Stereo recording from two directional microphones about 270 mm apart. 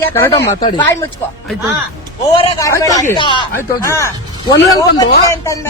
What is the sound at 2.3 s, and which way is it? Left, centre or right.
Speech, centre.